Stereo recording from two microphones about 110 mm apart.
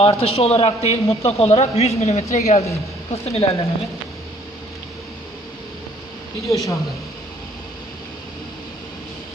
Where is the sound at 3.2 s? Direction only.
70° left (ahead or behind).